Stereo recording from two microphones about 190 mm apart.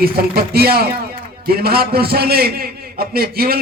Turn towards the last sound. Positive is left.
turn(degrees=-55)  # may be behind; listen again after turning